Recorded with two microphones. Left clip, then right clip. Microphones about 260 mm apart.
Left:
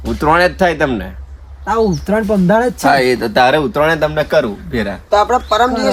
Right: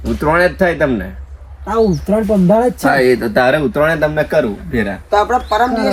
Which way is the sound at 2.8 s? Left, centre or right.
Left.